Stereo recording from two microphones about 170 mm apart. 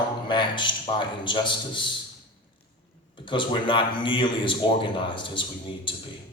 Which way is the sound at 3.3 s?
30° left (ahead or behind).